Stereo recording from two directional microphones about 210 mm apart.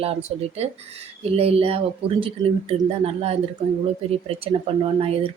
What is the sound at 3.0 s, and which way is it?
Speech, 30° right (ahead or behind).